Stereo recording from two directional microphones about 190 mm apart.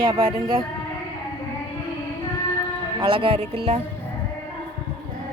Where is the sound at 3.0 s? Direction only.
30° right (ahead or behind).